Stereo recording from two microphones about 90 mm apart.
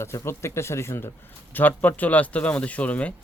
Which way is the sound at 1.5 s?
20° left (ahead or behind).